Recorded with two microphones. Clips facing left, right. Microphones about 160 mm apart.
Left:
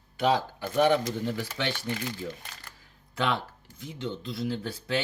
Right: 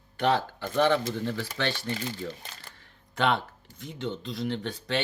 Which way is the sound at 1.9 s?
30° right (ahead or behind).